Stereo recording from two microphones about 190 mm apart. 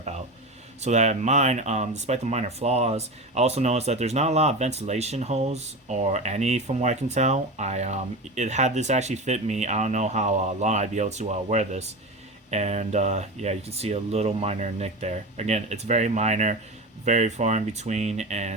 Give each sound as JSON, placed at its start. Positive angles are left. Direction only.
{"t": 0.8, "sound": "speech", "side_deg": -35}